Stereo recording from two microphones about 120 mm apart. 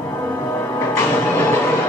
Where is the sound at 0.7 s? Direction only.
20° left (ahead or behind).